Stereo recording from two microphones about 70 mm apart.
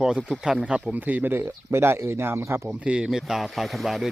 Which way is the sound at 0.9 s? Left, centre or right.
Right.